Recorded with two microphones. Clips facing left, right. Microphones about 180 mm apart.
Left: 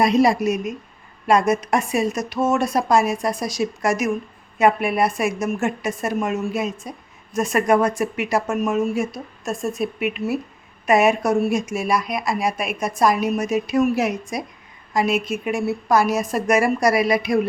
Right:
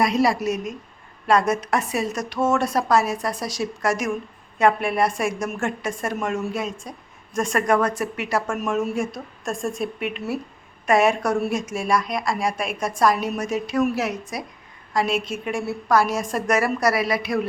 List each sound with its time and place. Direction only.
0.0 s a woman's voice: 20° left (ahead or behind)